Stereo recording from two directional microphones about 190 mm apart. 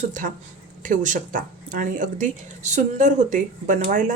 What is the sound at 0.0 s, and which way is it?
Speech, 45° right (ahead or behind).